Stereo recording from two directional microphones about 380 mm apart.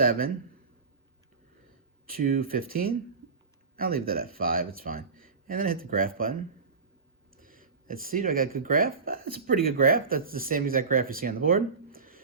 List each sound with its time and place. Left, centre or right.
2.0 s speech: right